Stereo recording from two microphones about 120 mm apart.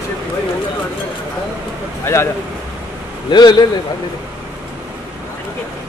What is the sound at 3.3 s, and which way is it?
Speech, 35° left (ahead or behind).